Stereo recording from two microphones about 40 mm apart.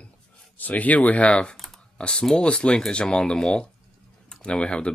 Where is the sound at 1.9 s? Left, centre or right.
Left.